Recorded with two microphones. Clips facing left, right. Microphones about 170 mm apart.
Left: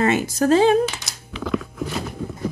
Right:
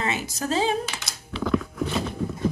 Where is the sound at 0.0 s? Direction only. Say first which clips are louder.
Left 9 dB; 55° left (ahead or behind).